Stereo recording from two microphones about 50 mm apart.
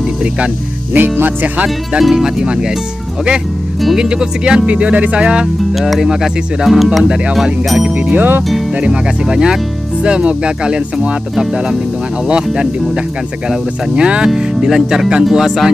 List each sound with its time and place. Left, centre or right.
0.9 s speech: right
2.0 s speech: centre
3.9 s speech: centre
5.6 s speech: centre
7.9 s speech: right
8.8 s speech: centre
12.3 s speech: centre